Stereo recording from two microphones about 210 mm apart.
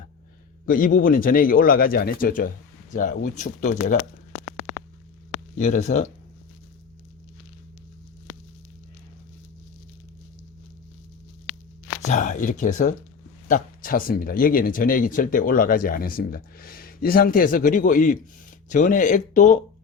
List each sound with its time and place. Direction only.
0.6 s speech: 40° left (ahead or behind)
5.3 s speech: 35° left (ahead or behind)
12.0 s speech: 35° left (ahead or behind)